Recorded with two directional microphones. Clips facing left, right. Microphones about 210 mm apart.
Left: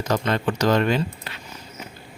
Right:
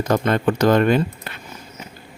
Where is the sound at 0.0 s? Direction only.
50° right (ahead or behind).